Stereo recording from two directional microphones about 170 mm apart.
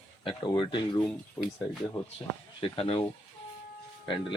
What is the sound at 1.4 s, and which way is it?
Speech, 15° left (ahead or behind).